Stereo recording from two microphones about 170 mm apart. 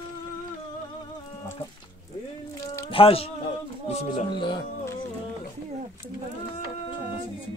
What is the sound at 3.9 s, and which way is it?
Speech, 45° left (ahead or behind).